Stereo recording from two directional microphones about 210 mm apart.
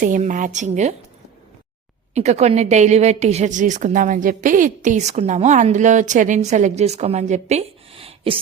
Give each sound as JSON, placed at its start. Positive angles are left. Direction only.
{"t": 0.0, "sound": "a woman's voice", "side_deg": -40}
{"t": 2.1, "sound": "a woman's voice", "side_deg": -30}